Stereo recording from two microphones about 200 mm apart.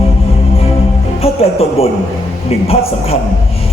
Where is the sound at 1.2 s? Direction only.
30° left (ahead or behind).